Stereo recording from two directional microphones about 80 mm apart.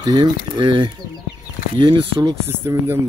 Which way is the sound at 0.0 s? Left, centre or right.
Right.